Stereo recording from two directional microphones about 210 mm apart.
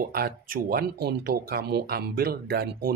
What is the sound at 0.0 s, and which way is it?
Speech, 45° right (ahead or behind).